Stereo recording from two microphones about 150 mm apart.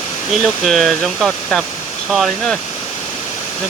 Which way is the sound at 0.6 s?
Centre (ahead or behind).